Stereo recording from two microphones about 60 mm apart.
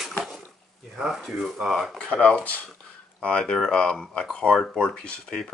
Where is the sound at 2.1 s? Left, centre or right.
Centre.